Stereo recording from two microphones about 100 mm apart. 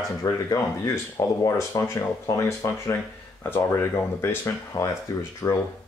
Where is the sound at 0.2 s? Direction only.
35° left (ahead or behind).